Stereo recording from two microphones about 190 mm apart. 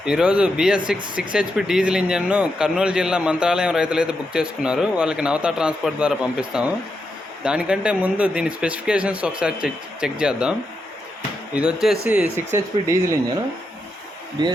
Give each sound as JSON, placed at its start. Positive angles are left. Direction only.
{"t": 0.0, "sound": "speech", "side_deg": -5}
{"t": 11.5, "sound": "speech", "side_deg": -5}
{"t": 14.4, "sound": "speech", "side_deg": -25}